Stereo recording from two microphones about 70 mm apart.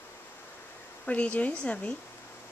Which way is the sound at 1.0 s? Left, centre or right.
Centre.